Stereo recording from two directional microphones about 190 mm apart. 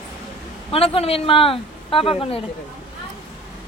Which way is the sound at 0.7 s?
30° left (ahead or behind).